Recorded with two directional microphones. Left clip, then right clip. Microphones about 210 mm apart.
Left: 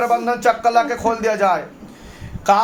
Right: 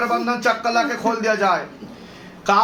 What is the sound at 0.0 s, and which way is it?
Speech, 60° left (ahead or behind).